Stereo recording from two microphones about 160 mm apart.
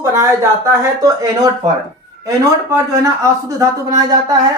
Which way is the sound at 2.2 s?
20° right (ahead or behind).